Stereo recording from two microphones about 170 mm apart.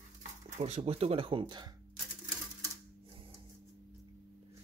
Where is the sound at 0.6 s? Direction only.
40° right (ahead or behind).